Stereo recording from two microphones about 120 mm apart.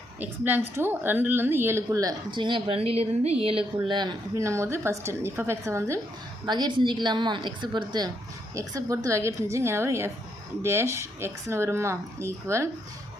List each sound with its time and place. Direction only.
0.2 s a woman's voice: 15° right (ahead or behind); by 3.7 s 50° right (ahead or behind)
3.8 s speech: 40° right (ahead or behind)
4.4 s a woman's voice: 25° right (ahead or behind)
6.4 s a woman's voice: 35° right (ahead or behind)